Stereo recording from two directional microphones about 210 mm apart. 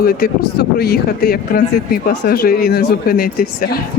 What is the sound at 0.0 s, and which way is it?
Speech, 45° left (ahead or behind).